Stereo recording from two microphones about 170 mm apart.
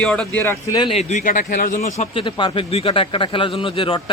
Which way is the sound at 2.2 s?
30° left (ahead or behind).